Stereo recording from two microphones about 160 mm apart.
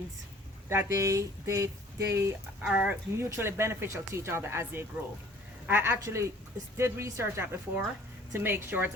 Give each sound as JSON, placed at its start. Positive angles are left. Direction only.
{"t": 0.7, "sound": "speech", "side_deg": -15}